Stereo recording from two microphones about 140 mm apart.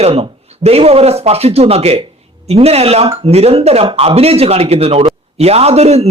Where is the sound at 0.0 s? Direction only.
45° right (ahead or behind).